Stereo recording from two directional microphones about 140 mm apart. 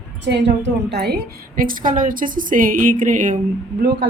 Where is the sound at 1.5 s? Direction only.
80° right; by 3.3 s 65° right (ahead or behind).